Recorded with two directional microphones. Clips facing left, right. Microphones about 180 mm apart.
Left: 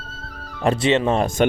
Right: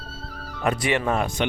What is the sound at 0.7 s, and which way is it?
Speech, 25° left (ahead or behind).